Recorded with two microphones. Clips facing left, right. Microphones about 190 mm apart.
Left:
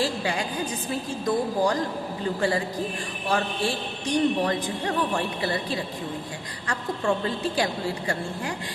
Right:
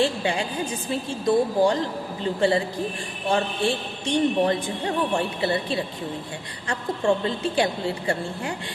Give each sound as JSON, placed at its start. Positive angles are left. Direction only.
{"t": 0.0, "sound": "a man's voice", "side_deg": -25}